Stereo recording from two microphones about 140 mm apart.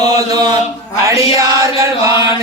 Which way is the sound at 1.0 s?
25° right (ahead or behind).